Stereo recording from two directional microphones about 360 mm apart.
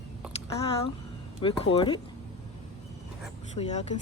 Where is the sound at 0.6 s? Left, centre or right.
Centre.